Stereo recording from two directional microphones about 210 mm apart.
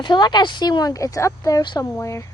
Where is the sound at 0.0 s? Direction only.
20° left (ahead or behind).